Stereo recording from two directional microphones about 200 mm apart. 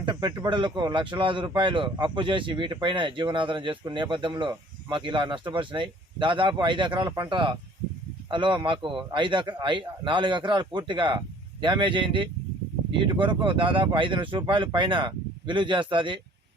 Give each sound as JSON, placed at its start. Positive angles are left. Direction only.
{"t": 0.0, "sound": "speech", "side_deg": -25}